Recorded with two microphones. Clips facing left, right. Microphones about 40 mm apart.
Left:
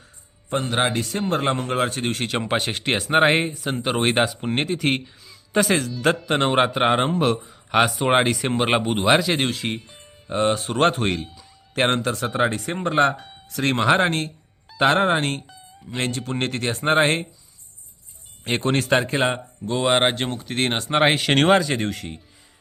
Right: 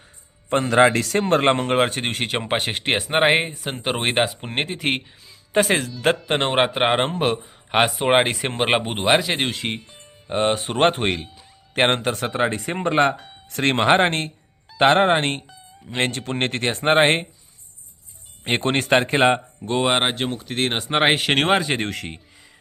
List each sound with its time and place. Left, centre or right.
0.5 s a man's voice: right
1.3 s speech: right
2.5 s speech: right
9.8 s music: centre
10.2 s speech: right
13.1 s a sound: centre
13.5 s speech: right
18.4 s speech: right
20.0 s speech: centre
20.8 s speech: right
21.5 s speech: right
21.8 s a man's voice: right